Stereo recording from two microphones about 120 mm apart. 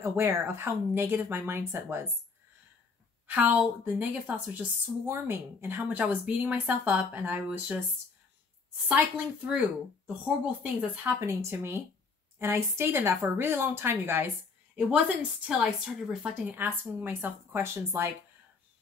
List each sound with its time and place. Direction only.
0.0 s speech: 20° right (ahead or behind)
3.3 s a woman's voice: 15° right (ahead or behind)
8.8 s a woman's voice: 10° right (ahead or behind)
11.1 s speech: 20° right (ahead or behind)
15.6 s a woman's voice: centre (ahead or behind)
16.4 s a woman's voice: 15° right (ahead or behind)